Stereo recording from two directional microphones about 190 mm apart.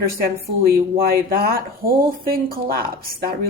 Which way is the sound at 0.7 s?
50° right (ahead or behind).